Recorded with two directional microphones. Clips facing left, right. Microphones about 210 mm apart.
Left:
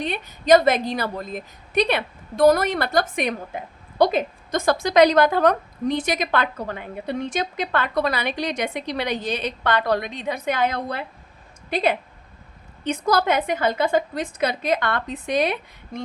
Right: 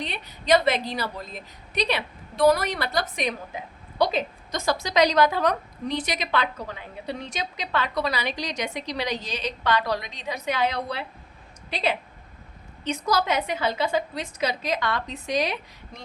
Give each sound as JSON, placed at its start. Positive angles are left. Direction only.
{"t": 0.0, "sound": "a woman's voice", "side_deg": 50}